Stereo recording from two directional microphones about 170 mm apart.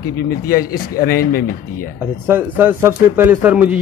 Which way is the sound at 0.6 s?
20° left (ahead or behind).